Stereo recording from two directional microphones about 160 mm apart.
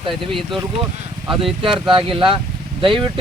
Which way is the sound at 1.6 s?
30° right (ahead or behind).